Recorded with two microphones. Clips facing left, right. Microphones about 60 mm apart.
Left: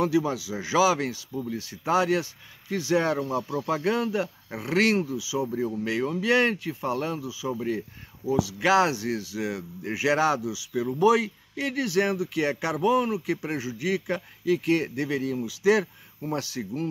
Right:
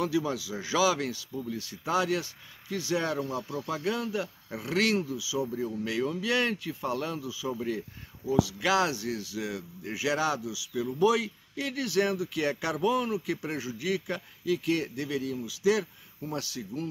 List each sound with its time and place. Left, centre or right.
0.0 s speech: centre
7.2 s speech: centre
8.5 s speech: left